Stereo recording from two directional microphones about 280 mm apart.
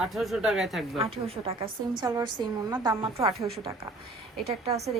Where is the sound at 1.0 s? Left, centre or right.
Right.